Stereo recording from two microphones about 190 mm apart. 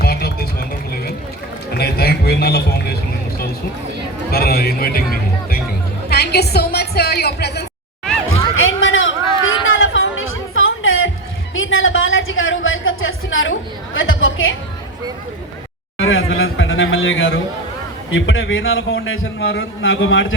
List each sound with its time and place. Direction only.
0.0 s music: 55° left (ahead or behind)
1.8 s vehicle: 55° left (ahead or behind)
4.3 s speech: 55° left (ahead or behind)
6.1 s music: 55° left (ahead or behind)
8.3 s a sound: 90° left
9.6 s music: 90° left
11.5 s a sound: 90° left
16.0 s a sound: 90° left
18.1 s a man's voice: 90° left